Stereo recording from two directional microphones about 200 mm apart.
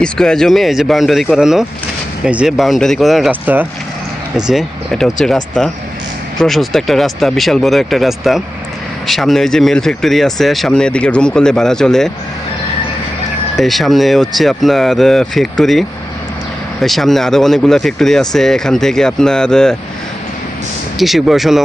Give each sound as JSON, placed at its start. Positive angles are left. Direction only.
{"t": 0.0, "sound": "speech", "side_deg": 5}
{"t": 13.6, "sound": "speech", "side_deg": 0}
{"t": 16.8, "sound": "speech", "side_deg": 0}
{"t": 21.0, "sound": "speech", "side_deg": 0}